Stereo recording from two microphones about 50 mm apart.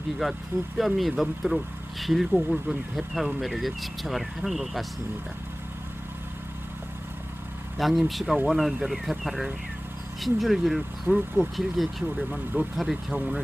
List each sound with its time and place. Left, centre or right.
0.2 s speech: centre
7.8 s speech: centre
12.1 s speech: right
12.7 s speech: centre